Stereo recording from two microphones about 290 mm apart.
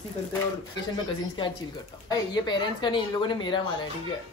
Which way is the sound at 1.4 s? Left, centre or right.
Centre.